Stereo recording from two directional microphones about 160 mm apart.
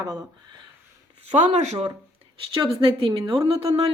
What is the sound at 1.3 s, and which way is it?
Speech, 45° right (ahead or behind).